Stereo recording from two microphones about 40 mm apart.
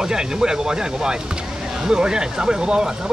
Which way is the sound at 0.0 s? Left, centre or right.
Centre.